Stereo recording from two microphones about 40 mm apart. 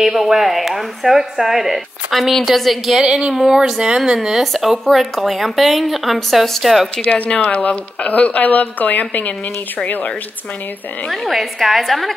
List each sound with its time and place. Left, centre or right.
0.1 s a woman's voice: centre
3.0 s speech: right
3.3 s speech: centre
4.8 s a woman's voice: centre
7.0 s speech: left
11.1 s a woman's voice: centre